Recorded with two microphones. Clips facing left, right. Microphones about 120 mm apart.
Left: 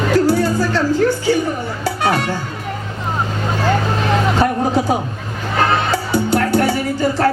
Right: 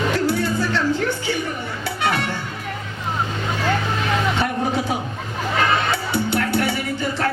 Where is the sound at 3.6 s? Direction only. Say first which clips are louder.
Left 5 dB; 40° left (ahead or behind).